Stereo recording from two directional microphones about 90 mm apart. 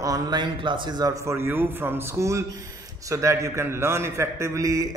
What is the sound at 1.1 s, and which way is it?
A man's voice, 30° right (ahead or behind).